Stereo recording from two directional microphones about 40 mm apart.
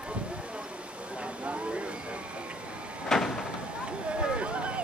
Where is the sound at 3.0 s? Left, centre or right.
Centre.